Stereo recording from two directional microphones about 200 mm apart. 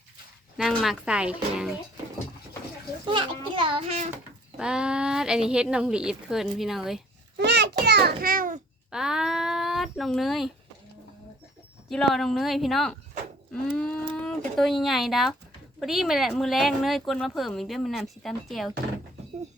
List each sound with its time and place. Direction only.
0.5 s speech: centre (ahead or behind)
3.1 s a child's voice: 25° right (ahead or behind)
4.5 s speech: 5° right (ahead or behind)
7.3 s a sound: 60° right (ahead or behind); by 8.6 s 45° right (ahead or behind)
8.9 s a sound: 5° right (ahead or behind)
11.9 s speech: centre (ahead or behind)